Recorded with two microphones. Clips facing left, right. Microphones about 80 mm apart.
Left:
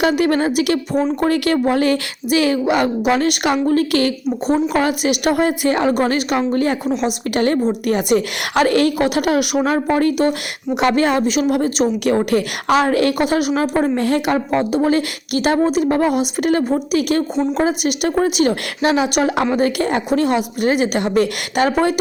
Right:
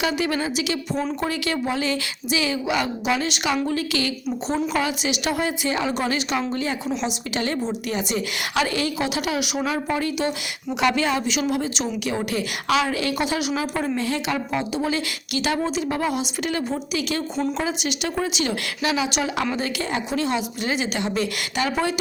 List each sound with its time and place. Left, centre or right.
0.0 s a woman's voice: left
9.6 s a woman's voice: left